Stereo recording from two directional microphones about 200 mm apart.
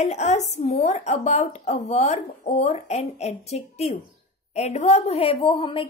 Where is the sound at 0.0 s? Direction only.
35° left (ahead or behind).